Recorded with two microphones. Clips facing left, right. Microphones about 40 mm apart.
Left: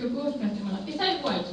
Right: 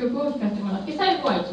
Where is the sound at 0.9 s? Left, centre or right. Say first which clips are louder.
Right 6 dB; centre.